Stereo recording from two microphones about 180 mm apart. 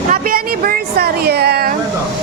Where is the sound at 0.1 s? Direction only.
55° right (ahead or behind).